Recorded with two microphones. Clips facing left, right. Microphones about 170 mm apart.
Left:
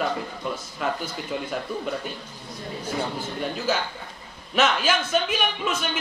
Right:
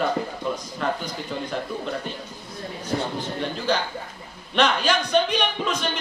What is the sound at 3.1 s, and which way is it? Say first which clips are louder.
A man's voice: right 1 dB; 5° left (ahead or behind).